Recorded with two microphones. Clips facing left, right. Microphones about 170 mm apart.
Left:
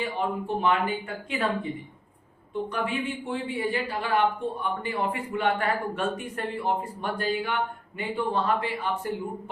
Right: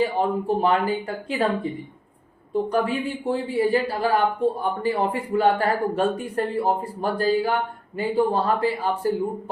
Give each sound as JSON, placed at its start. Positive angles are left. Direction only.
{"t": 0.0, "sound": "a man's voice", "side_deg": -35}
{"t": 2.5, "sound": "a man's voice", "side_deg": -35}